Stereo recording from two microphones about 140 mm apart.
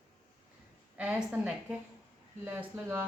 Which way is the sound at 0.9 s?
10° right (ahead or behind).